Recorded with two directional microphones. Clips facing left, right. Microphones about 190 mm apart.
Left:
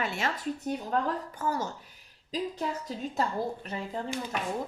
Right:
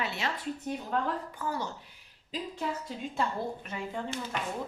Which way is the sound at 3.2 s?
40° left (ahead or behind).